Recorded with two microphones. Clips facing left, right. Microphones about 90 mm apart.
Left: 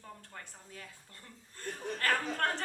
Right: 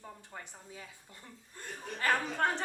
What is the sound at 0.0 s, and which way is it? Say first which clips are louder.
A woman's voice: right 2 dB; 10° right (ahead or behind).